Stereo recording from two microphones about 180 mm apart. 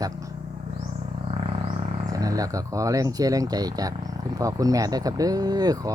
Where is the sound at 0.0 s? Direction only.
20° right (ahead or behind).